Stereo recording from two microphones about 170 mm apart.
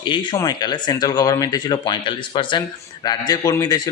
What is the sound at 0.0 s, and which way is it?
Speech, 30° left (ahead or behind).